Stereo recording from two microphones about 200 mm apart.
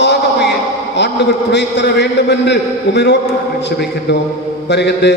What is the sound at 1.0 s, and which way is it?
A man's voice, 60° left (ahead or behind).